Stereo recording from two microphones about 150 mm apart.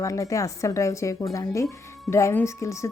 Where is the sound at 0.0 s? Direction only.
20° left (ahead or behind).